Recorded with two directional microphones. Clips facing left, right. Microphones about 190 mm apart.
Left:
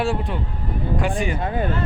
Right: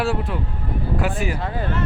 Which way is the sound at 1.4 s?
20° left (ahead or behind).